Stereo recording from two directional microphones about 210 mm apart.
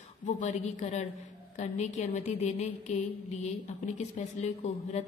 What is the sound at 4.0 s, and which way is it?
Speech, 30° left (ahead or behind).